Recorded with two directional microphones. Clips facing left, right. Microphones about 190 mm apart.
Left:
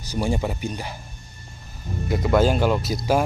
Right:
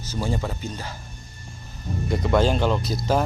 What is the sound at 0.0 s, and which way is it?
Speech, 15° left (ahead or behind).